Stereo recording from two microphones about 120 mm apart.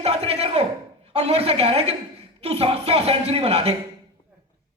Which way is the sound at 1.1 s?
60° right (ahead or behind).